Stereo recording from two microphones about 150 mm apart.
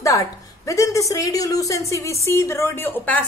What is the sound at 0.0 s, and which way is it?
A woman's voice, 20° left (ahead or behind).